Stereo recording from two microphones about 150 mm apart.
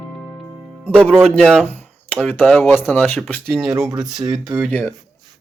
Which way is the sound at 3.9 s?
25° right (ahead or behind).